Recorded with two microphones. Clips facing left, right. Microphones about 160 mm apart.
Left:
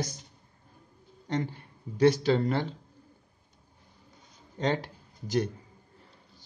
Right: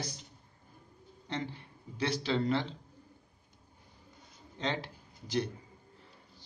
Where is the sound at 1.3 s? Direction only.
45° left (ahead or behind).